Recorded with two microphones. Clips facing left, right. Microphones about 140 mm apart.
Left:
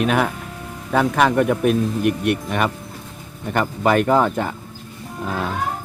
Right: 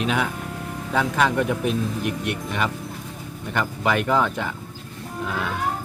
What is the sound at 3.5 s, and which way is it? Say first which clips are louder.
Speech: left 5 dB; 45° left (ahead or behind).